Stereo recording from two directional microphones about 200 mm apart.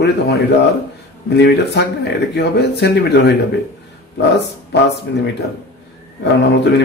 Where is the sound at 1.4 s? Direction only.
55° left (ahead or behind).